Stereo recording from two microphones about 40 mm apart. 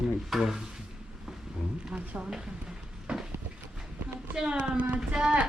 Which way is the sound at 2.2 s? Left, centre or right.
Centre.